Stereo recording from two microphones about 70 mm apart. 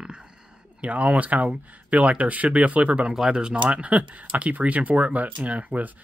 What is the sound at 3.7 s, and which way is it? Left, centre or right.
Speech, centre.